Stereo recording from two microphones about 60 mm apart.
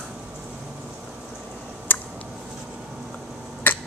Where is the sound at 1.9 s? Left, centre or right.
Left.